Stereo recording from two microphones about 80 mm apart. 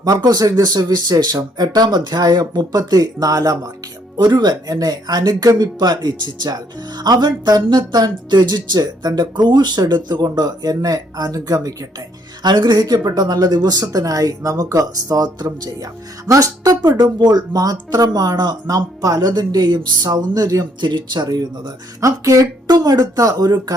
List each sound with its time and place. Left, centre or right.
0.0 s speech: right
4.2 s speech: right
12.4 s speech: right
17.0 s speech: right
20.8 s speech: right
22.0 s speech: right